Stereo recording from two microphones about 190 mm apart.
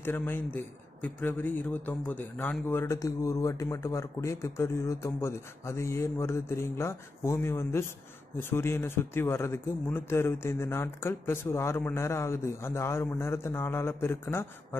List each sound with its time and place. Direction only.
0.0 s a man's voice: 10° left (ahead or behind)